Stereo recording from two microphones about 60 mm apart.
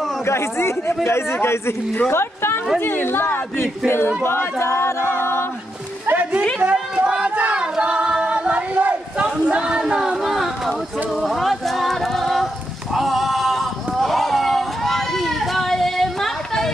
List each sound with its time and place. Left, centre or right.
0.2 s a woman's voice: left
6.0 s music: right
6.6 s singing: right
9.2 s a sound: centre
11.1 s a capella: centre
12.9 s a sound: centre